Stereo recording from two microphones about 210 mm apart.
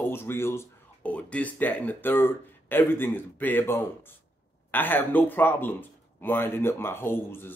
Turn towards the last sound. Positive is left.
turn(degrees=10)  # may be behind; listen again after turning